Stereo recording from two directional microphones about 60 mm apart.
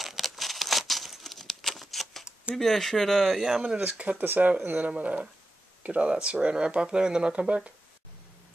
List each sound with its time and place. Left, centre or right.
0.0 s crumpling: centre
2.5 s speech: centre
3.3 s speech: centre
4.2 s speech: right